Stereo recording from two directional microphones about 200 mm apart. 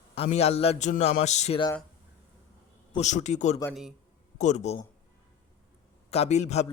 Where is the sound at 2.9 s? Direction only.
35° left (ahead or behind).